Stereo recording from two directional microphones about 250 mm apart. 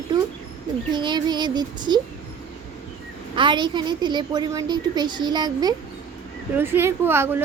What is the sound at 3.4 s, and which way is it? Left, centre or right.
A woman's voice, centre.